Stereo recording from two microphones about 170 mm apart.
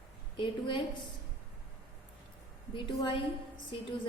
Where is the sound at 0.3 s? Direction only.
30° left (ahead or behind).